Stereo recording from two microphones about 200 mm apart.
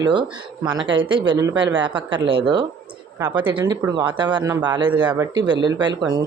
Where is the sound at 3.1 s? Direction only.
15° right (ahead or behind).